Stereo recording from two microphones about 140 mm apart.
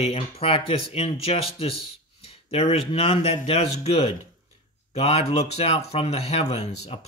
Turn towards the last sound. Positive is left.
turn(degrees=45)  # may be behind; listen again after turning